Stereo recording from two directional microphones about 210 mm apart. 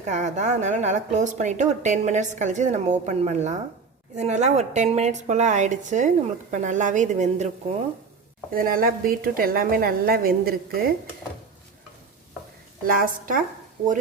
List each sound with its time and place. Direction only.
0.0 s a woman's voice: 35° right (ahead or behind)
8.5 s a woman's voice: 45° right (ahead or behind)
12.8 s a woman's voice: 45° right (ahead or behind)